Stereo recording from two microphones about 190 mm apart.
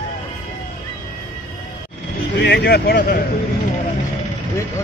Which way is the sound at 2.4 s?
60° left (ahead or behind).